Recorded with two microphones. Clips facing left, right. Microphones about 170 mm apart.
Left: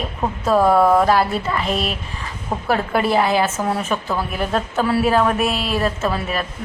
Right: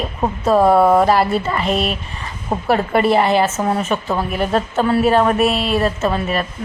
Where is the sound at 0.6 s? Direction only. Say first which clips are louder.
Right 2 dB; 25° right (ahead or behind).